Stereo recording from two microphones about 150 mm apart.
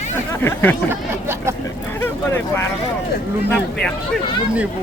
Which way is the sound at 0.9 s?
15° right (ahead or behind).